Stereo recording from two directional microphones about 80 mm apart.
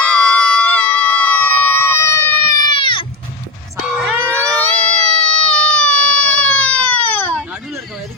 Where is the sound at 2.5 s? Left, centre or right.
Left.